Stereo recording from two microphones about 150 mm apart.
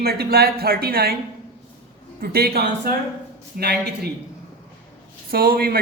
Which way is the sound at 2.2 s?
90° right.